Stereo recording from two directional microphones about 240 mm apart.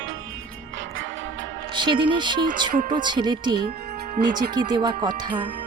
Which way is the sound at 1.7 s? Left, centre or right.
Centre.